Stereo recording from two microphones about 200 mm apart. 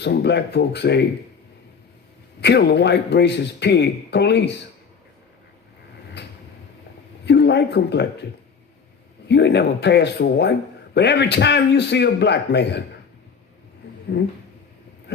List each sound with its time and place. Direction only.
0.0 s a man's voice: 60° left (ahead or behind)
2.4 s a man's voice: 55° left (ahead or behind)
7.3 s speech: 60° left (ahead or behind)
9.3 s a man's voice: 60° left (ahead or behind)